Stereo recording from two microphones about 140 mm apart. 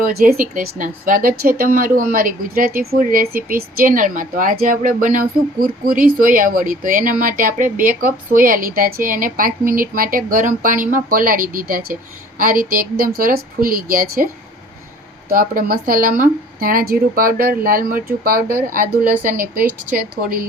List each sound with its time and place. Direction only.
0.0 s speech: 90° right
15.3 s speech: 90° right
18.7 s speech: 75° right (ahead or behind)